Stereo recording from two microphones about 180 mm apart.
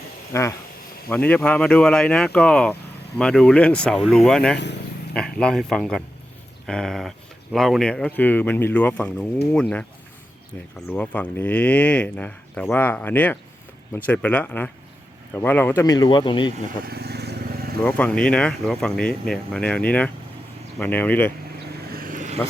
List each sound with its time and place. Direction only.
0.3 s speech: 15° left (ahead or behind)
4.5 s speech: 70° left (ahead or behind)
5.1 s speech: 5° left (ahead or behind)
10.8 s speech: 10° left (ahead or behind); by 16.6 s 25° left (ahead or behind)
16.8 s vehicle: 60° right (ahead or behind)
17.8 s speech: 5° left (ahead or behind)
21.8 s vehicle: 55° right (ahead or behind)